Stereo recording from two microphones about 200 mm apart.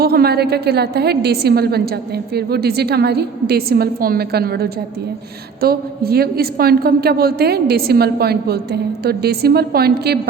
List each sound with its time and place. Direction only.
0.0 s a woman's voice: 50° right (ahead or behind)